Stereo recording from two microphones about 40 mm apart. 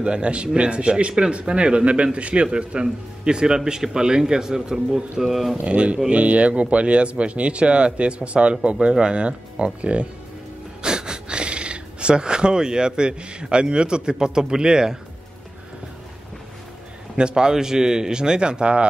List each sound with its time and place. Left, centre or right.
0.0 s a man's voice: right
5.2 s speech: centre
5.7 s speech: right
10.8 s speech: centre
17.2 s speech: right